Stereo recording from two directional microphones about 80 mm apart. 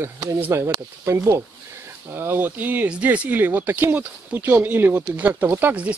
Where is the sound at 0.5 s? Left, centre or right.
Right.